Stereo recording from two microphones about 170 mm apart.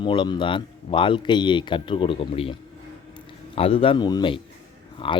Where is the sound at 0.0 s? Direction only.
30° left (ahead or behind).